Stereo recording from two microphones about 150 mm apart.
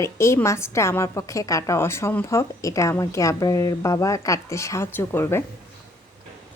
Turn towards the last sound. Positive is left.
turn(degrees=15)  # may be behind; listen again after turning